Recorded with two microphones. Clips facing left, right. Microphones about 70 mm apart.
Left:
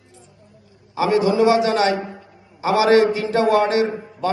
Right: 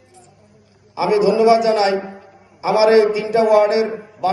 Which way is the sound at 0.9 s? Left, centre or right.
Right.